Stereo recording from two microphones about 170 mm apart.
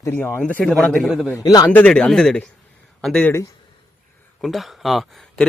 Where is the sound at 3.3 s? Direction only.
20° left (ahead or behind).